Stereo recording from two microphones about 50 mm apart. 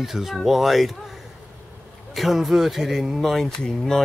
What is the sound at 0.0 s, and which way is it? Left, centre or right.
Speech, centre.